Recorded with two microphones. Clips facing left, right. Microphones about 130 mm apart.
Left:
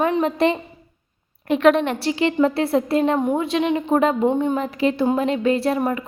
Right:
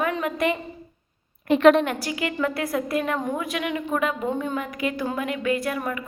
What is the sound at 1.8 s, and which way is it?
A woman's voice, 30° left (ahead or behind).